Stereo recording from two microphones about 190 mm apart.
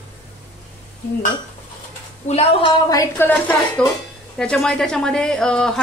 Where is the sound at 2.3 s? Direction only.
30° left (ahead or behind).